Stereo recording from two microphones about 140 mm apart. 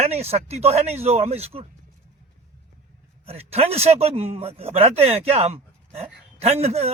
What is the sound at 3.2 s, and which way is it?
Speech, 45° right (ahead or behind).